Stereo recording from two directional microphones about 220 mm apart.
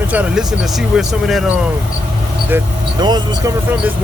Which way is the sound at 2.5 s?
10° right (ahead or behind).